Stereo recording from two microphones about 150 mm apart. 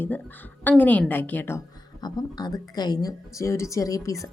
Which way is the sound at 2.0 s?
25° left (ahead or behind).